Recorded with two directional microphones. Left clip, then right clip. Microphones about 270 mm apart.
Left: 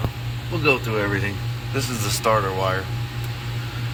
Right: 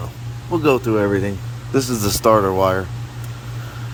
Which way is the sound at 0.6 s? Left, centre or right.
Right.